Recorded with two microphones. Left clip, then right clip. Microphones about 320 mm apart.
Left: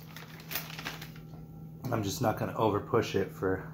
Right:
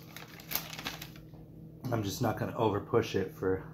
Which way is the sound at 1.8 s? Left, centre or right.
Centre.